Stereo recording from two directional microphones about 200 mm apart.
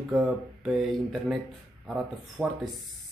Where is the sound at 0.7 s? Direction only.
Centre (ahead or behind).